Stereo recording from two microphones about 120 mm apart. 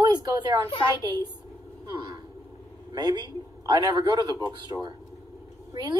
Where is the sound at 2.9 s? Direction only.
35° right (ahead or behind).